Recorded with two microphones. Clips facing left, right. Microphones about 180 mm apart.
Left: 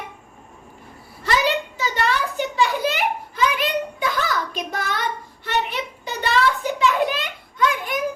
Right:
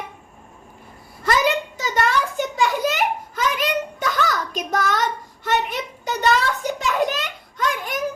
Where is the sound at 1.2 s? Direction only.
45° right (ahead or behind).